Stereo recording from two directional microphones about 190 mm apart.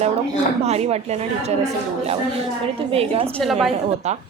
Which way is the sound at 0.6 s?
35° right (ahead or behind).